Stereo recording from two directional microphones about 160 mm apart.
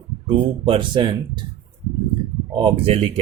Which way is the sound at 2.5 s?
30° right (ahead or behind).